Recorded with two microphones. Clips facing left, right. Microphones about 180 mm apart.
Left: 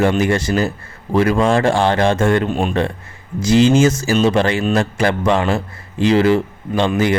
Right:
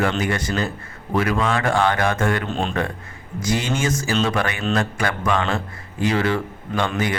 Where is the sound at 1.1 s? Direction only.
30° left (ahead or behind).